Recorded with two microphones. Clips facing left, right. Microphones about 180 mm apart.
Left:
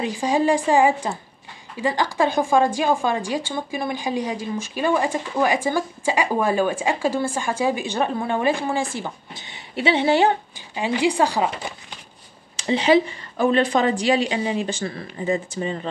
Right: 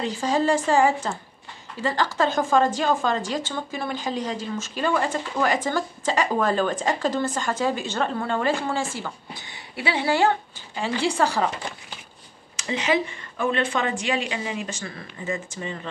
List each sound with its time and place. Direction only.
0.0 s speech: 15° left (ahead or behind)
12.5 s a woman's voice: 30° left (ahead or behind)